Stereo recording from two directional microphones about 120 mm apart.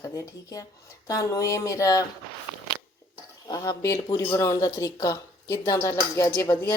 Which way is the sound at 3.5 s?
35° left (ahead or behind).